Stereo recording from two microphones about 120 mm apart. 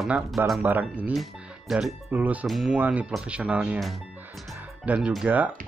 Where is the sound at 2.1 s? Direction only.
15° right (ahead or behind).